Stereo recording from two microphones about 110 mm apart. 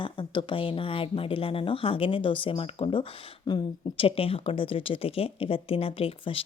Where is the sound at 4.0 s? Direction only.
60° left (ahead or behind).